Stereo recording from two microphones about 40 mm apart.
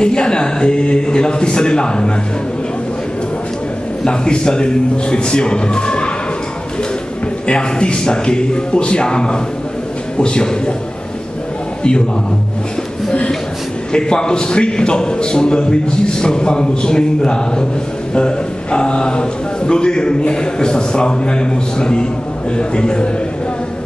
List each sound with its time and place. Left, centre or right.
0.0 s a man's voice: left
4.0 s a man's voice: left
7.4 s a man's voice: left
13.9 s a man's voice: left